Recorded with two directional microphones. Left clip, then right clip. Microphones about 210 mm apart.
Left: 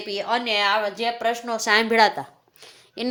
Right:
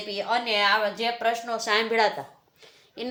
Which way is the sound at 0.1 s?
45° left (ahead or behind).